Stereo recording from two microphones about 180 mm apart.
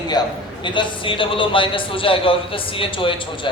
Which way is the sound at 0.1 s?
25° left (ahead or behind).